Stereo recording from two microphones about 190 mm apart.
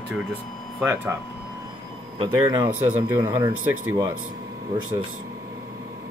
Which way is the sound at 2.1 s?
25° right (ahead or behind).